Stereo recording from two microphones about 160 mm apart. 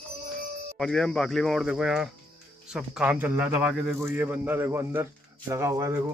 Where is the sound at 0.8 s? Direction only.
5° left (ahead or behind); by 6.0 s 20° right (ahead or behind).